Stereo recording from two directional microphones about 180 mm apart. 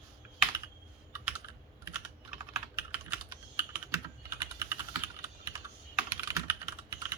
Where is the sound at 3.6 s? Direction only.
15° right (ahead or behind).